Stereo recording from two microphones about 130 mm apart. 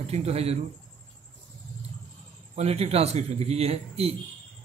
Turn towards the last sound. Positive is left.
turn(degrees=-50)  # may be behind; listen again after turning